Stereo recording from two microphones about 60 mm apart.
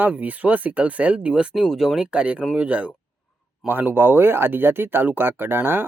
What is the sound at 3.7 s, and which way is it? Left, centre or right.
Speech, right.